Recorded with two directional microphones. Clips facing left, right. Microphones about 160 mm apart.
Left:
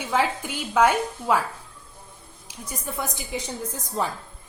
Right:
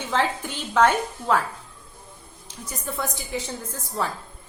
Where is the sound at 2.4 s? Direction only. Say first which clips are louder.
Right 1 dB; 10° left (ahead or behind).